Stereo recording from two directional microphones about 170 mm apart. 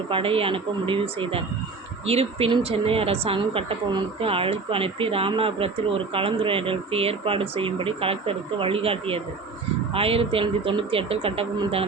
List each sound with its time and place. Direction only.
0.1 s speech: 30° right (ahead or behind)